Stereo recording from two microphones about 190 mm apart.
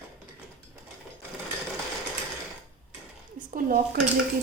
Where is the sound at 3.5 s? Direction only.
45° right (ahead or behind).